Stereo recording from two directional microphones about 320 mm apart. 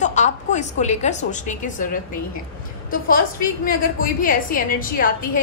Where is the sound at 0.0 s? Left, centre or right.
Left.